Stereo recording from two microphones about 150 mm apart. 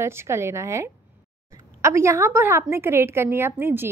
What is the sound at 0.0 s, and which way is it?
A woman's voice, 15° right (ahead or behind).